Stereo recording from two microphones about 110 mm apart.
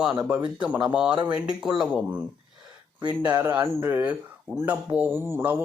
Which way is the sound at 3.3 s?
20° right (ahead or behind).